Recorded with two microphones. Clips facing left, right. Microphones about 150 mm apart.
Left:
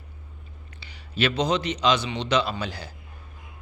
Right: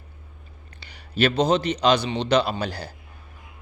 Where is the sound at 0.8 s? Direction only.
50° right (ahead or behind).